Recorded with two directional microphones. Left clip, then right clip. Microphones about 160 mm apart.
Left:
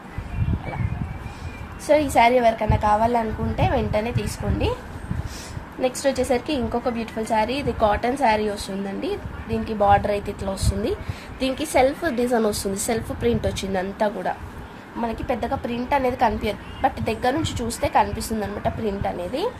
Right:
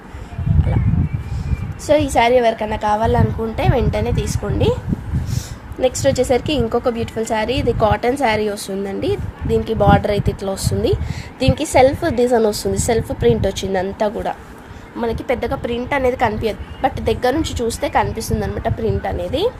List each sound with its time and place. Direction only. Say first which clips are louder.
1.9 s a woman's voice: right 3 dB; 35° right (ahead or behind)
5.8 s a woman's voice: right 6 dB; 40° right (ahead or behind)
15.0 s a woman's voice: right 6 dB; 40° right (ahead or behind)